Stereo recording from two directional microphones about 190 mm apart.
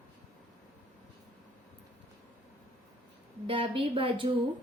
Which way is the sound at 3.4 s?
30° right (ahead or behind).